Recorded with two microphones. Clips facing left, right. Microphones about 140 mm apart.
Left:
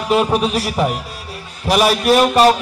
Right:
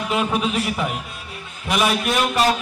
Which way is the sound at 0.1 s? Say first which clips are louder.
Left 7 dB; 35° left (ahead or behind).